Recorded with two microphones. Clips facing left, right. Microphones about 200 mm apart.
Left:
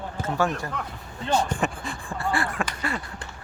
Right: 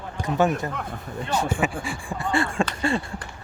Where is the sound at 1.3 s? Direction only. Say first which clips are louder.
Even; 5° right (ahead or behind); by 3.0 s 25° right (ahead or behind).